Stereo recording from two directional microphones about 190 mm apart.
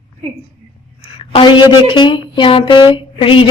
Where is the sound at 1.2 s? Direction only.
25° left (ahead or behind).